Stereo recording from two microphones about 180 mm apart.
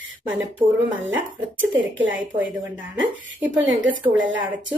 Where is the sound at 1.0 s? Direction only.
90° right.